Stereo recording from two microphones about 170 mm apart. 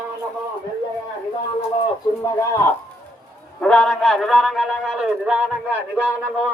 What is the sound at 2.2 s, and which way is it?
Speech, 15° left (ahead or behind).